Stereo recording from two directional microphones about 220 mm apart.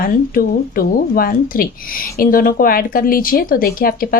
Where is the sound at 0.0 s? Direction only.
40° left (ahead or behind).